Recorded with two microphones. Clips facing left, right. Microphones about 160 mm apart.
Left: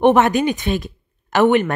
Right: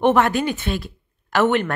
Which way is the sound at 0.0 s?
20° left (ahead or behind).